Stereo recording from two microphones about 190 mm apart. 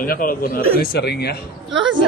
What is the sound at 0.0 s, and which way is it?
Speech, 50° left (ahead or behind).